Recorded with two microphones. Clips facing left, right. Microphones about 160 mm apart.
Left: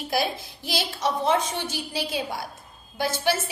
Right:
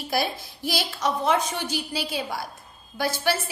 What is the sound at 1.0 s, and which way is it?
A woman's voice, 25° left (ahead or behind).